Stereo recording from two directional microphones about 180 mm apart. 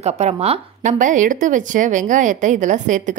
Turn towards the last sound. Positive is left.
turn(degrees=-45)  # may be behind; listen again after turning